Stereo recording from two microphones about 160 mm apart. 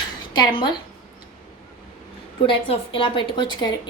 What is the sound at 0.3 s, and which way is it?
Speech, 30° left (ahead or behind).